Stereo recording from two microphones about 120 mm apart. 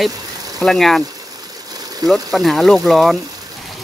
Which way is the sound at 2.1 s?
Centre (ahead or behind).